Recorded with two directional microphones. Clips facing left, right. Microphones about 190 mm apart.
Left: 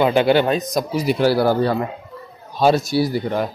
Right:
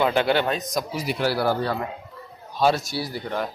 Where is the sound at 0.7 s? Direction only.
25° left (ahead or behind).